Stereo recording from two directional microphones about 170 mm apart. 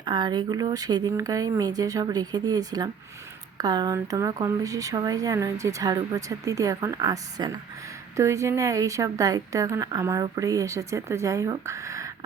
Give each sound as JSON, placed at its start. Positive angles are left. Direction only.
{"t": 0.0, "sound": "a woman's voice", "side_deg": -25}